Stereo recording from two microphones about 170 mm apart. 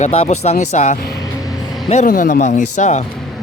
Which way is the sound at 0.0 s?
40° left (ahead or behind).